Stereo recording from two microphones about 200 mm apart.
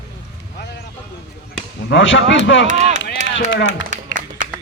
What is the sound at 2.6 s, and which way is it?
Speech, 40° right (ahead or behind).